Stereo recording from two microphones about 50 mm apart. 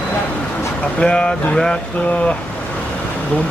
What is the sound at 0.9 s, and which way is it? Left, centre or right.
Speech, centre.